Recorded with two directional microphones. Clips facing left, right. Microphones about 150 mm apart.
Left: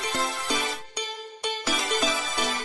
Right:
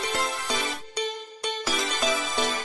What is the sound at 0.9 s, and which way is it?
Music, centre (ahead or behind).